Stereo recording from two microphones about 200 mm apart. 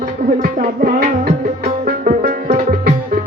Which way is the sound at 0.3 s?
45° right (ahead or behind).